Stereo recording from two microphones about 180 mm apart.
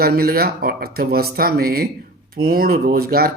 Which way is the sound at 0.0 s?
55° right (ahead or behind).